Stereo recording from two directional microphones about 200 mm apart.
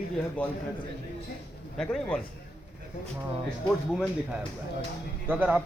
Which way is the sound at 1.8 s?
5° left (ahead or behind).